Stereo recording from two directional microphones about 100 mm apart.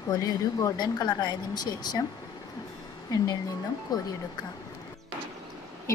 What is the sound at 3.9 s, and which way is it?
Speech, 40° left (ahead or behind).